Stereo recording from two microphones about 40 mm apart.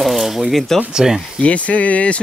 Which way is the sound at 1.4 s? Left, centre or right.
Left.